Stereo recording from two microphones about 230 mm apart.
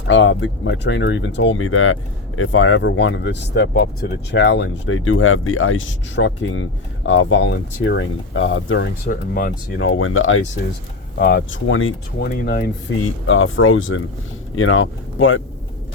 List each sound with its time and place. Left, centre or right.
0.1 s speech: left
9.0 s speech: left
9.7 s speech: left
11.2 s speech: left
12.2 s speech: left
13.2 s speech: left